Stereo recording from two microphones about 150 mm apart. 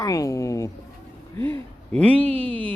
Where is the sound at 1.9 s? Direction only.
10° left (ahead or behind).